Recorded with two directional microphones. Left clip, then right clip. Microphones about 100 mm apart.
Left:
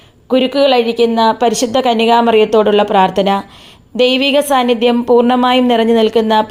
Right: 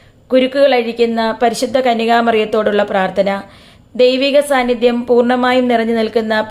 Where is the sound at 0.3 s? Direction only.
40° left (ahead or behind).